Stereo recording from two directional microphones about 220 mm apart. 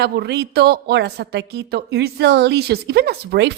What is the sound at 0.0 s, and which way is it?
A woman's voice, 50° right (ahead or behind).